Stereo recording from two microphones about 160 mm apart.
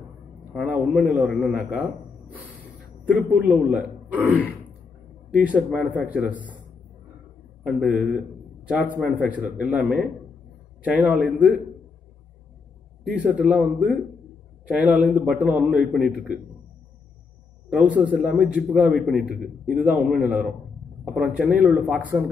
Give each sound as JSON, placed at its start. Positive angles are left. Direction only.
{"t": 0.5, "sound": "a man's voice", "side_deg": -5}
{"t": 5.3, "sound": "a man's voice", "side_deg": -10}
{"t": 7.6, "sound": "a man's voice", "side_deg": 0}
{"t": 13.1, "sound": "a man's voice", "side_deg": -10}
{"t": 17.6, "sound": "a man's voice", "side_deg": -5}
{"t": 22.1, "sound": "speech", "side_deg": -20}